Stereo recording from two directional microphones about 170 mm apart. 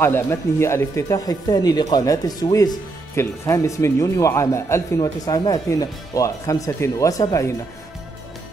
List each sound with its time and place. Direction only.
0.0 s speech: 15° left (ahead or behind)